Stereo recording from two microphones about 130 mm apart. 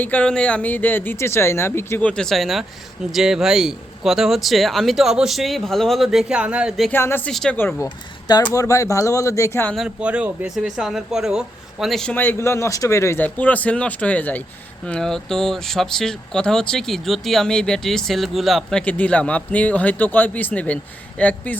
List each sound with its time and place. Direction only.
0.0 s speech: 10° left (ahead or behind)
6.9 s speech: 15° left (ahead or behind)
7.3 s speech: 5° left (ahead or behind)
7.5 s speech: 15° left (ahead or behind)
8.5 s speech: 25° left (ahead or behind)
9.7 s speech: 5° right (ahead or behind)
12.1 s speech: 15° left (ahead or behind)